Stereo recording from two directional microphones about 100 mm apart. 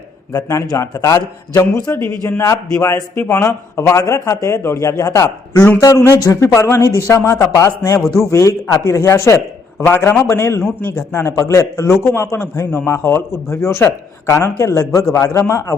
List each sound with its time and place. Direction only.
0.3 s a man's voice: 35° left (ahead or behind)